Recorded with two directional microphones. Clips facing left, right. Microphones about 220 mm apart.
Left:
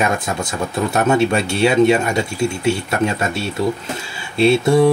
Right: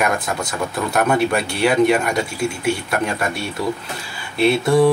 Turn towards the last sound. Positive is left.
turn(degrees=25)  # may be behind; listen again after turning